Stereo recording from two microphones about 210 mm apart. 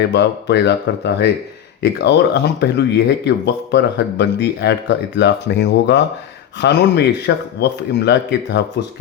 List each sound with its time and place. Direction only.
0.1 s speech: 55° left (ahead or behind)